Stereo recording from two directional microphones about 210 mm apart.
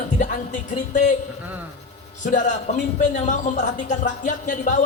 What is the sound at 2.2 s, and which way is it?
A man's voice, 35° left (ahead or behind).